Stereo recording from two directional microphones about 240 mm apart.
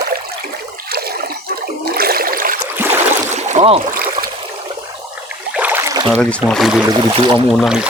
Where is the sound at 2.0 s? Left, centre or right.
Right.